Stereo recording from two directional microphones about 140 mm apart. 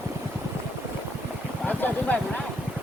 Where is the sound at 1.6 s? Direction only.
10° left (ahead or behind).